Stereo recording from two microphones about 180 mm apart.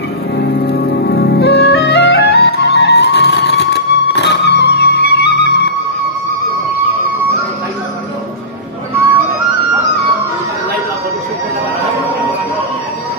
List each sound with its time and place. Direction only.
0.4 s music: 70° left (ahead or behind)